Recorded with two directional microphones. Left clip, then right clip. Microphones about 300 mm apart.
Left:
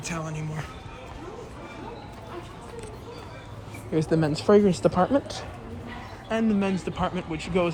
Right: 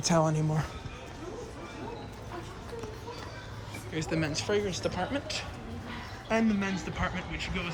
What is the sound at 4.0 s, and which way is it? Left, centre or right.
Speech, left.